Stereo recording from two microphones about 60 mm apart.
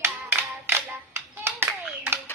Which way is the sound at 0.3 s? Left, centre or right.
Right.